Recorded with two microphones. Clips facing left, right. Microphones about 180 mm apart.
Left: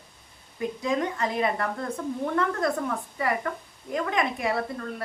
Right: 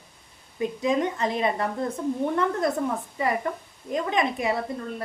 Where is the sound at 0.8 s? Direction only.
20° right (ahead or behind).